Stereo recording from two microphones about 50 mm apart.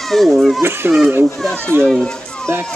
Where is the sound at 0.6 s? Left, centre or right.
Right.